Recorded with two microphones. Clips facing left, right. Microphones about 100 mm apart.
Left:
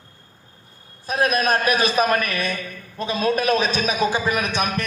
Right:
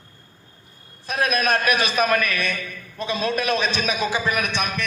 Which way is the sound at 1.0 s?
35° left (ahead or behind).